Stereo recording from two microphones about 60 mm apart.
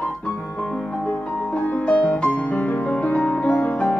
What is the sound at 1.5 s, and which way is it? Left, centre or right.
Music, left.